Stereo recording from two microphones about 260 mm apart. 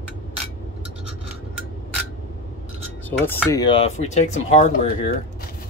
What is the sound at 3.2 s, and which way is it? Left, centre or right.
Speech, centre.